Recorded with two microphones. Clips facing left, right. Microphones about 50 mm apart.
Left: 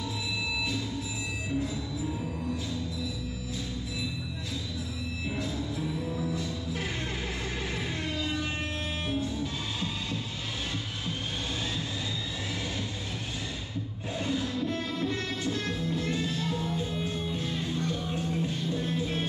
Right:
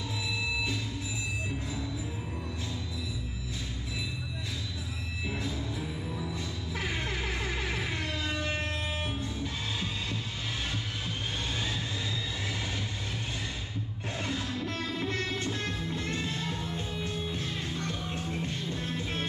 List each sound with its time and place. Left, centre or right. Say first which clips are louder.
15.9 s music: left 3 dB; right
16.2 s music: left 3 dB; right
17.4 s music: left 3 dB; right